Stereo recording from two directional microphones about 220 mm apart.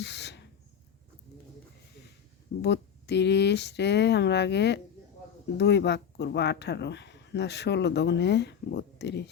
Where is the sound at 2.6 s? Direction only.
50° left (ahead or behind).